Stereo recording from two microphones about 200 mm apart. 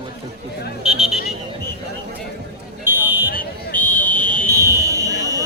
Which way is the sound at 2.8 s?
10° right (ahead or behind).